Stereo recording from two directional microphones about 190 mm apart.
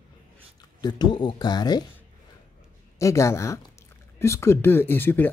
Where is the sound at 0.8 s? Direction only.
20° left (ahead or behind).